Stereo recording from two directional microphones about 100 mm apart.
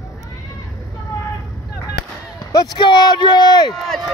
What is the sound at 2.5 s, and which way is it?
Speech, 45° left (ahead or behind).